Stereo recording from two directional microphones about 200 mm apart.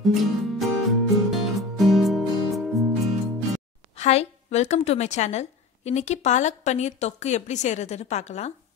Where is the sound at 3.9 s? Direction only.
30° left (ahead or behind).